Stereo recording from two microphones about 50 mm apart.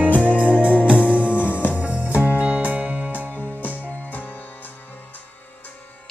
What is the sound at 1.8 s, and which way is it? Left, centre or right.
Music, right.